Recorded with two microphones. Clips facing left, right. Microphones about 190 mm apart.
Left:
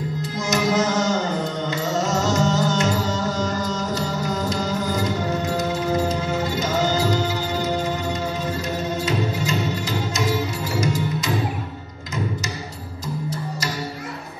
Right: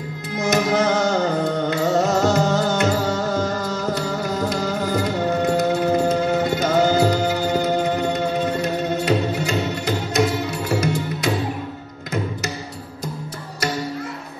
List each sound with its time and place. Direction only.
0.4 s music: 60° right (ahead or behind)